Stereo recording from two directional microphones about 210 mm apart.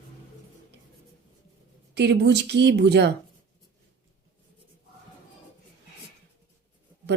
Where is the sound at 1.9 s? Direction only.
55° right (ahead or behind).